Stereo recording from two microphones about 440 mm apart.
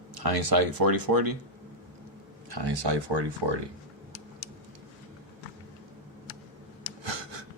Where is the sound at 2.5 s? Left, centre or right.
Right.